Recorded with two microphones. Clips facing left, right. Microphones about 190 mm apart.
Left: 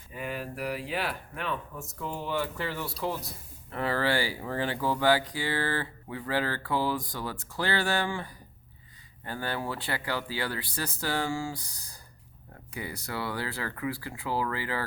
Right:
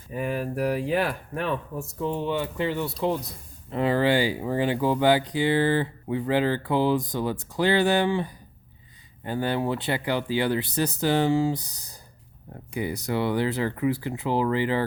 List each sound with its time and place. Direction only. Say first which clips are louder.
0.1 s speech: right 8 dB; 45° right (ahead or behind)
2.0 s speech: right 5 dB; 25° right (ahead or behind)